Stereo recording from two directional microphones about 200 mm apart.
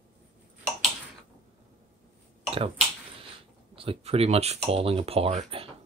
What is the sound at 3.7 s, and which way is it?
Speech, 25° right (ahead or behind).